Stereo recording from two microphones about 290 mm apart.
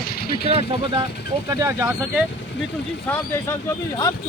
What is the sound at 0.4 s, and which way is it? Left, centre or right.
Speech, centre.